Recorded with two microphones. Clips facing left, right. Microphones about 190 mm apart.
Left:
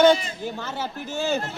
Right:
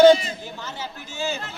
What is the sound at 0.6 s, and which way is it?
Speech, 55° left (ahead or behind).